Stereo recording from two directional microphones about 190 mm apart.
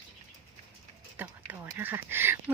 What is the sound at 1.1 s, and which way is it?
Speech, 10° right (ahead or behind).